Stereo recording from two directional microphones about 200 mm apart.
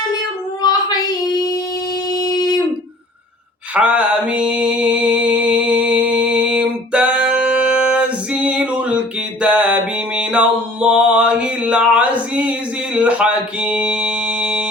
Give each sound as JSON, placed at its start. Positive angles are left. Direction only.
{"t": 0.6, "sound": "female singing", "side_deg": 20}
{"t": 2.2, "sound": "a sound", "side_deg": 20}
{"t": 3.8, "sound": "mantra", "side_deg": -5}
{"t": 9.4, "sound": "music", "side_deg": -5}